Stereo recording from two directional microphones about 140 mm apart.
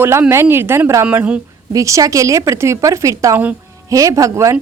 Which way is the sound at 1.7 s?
25° right (ahead or behind).